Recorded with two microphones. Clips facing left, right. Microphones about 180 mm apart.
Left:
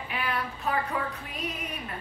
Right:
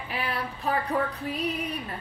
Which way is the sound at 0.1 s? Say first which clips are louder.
Even; 35° right (ahead or behind).